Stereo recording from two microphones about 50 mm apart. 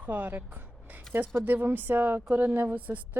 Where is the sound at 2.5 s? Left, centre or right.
Right.